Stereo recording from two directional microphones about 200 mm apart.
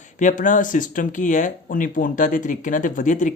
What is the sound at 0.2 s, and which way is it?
Speech, 40° left (ahead or behind).